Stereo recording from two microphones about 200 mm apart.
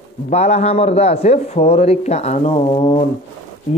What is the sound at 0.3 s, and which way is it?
A man's voice, 35° left (ahead or behind).